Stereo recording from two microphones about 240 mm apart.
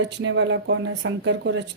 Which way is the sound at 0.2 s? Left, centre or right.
Right.